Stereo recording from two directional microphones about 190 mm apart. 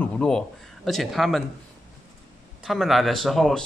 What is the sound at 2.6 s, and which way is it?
Speech, centre (ahead or behind).